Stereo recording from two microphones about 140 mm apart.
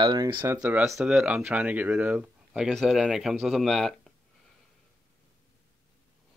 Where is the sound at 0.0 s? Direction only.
35° right (ahead or behind).